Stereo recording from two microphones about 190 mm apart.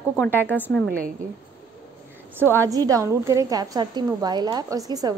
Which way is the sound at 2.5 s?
20° right (ahead or behind).